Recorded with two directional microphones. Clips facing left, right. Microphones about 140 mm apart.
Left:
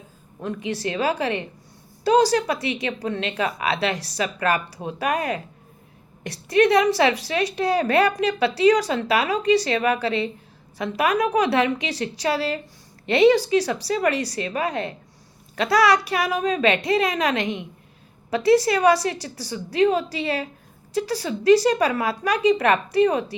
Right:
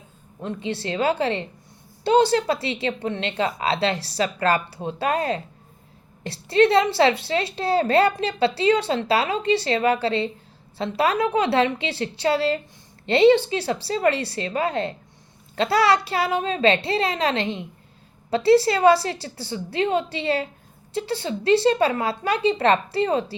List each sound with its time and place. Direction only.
0.4 s a woman's voice: 25° right (ahead or behind)